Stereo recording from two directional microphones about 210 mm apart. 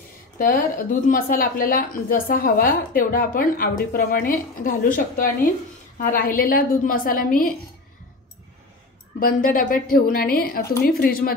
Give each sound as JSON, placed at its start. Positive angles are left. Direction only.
{"t": 0.4, "sound": "a woman's voice", "side_deg": 40}
{"t": 9.2, "sound": "a woman's voice", "side_deg": 40}